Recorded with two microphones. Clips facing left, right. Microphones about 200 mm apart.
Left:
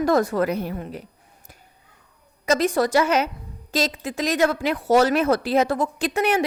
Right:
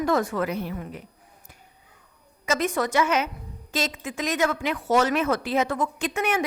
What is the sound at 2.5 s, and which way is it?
A woman's voice, 35° left (ahead or behind).